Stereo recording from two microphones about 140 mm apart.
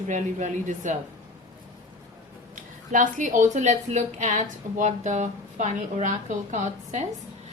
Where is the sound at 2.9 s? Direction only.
65° right (ahead or behind).